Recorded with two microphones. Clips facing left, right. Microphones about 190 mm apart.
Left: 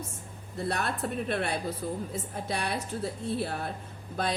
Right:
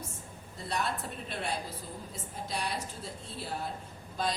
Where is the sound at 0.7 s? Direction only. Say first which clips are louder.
Left 2 dB; 60° left (ahead or behind).